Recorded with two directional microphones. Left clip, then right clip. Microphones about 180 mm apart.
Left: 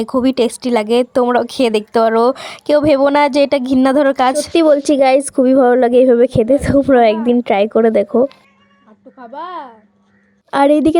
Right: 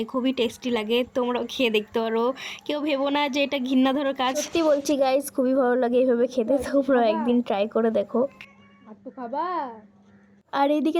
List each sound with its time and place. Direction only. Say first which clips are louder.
0.0 s speech: left 10 dB; 40° left (ahead or behind)
9.1 s a woman's voice: left 1 dB; 5° left (ahead or behind)
10.5 s speech: left 11 dB; 40° left (ahead or behind)